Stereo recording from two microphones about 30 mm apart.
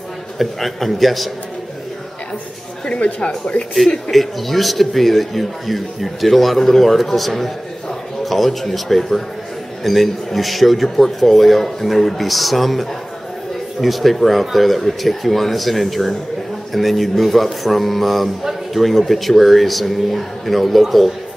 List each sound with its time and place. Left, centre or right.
0.4 s speech: centre
2.9 s speech: left
4.1 s speech: centre